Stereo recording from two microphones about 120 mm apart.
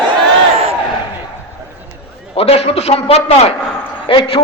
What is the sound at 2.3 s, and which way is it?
A man's voice, 55° left (ahead or behind).